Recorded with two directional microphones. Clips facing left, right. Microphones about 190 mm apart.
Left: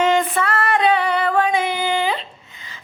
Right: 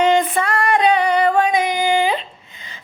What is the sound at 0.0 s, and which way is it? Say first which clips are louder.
Female singing: right 2 dB; 20° right (ahead or behind).